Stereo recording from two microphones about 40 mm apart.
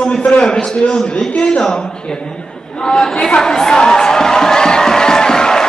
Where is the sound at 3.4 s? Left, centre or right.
Centre.